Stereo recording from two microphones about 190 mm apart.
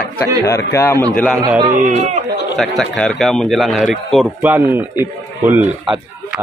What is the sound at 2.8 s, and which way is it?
A man's voice, 5° left (ahead or behind).